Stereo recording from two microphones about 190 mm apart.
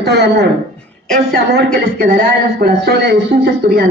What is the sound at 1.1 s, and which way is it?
A woman's voice, 50° right (ahead or behind).